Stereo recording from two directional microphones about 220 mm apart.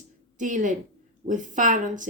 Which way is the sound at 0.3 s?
35° right (ahead or behind).